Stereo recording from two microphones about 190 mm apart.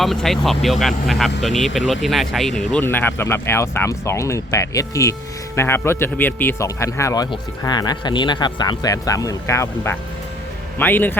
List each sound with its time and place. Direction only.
0.0 s speech: centre (ahead or behind)